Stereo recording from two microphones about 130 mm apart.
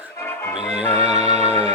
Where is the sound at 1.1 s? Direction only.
55° right (ahead or behind).